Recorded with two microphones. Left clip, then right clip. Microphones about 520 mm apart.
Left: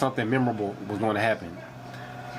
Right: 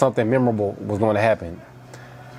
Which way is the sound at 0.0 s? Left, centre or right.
Right.